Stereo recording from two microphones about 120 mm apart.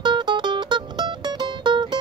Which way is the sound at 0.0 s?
40° right (ahead or behind).